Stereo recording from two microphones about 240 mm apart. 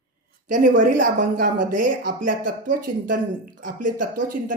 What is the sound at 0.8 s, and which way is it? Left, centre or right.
Speech, right.